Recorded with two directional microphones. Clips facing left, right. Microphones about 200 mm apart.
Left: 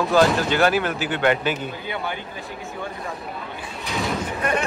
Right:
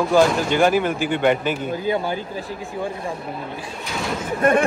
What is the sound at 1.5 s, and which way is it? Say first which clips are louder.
Speech: right 4 dB; 35° right (ahead or behind).